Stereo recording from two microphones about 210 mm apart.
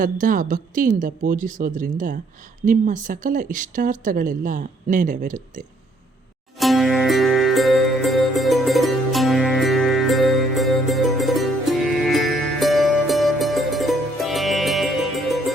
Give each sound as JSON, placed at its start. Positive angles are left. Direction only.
{"t": 0.0, "sound": "speech", "side_deg": -40}
{"t": 6.6, "sound": "music", "side_deg": 0}